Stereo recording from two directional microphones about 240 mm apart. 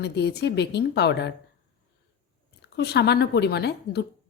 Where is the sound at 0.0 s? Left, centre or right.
Left.